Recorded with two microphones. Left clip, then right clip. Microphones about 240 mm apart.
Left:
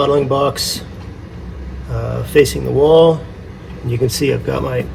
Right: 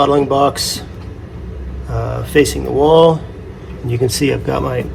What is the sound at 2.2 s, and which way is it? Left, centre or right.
Speech, right.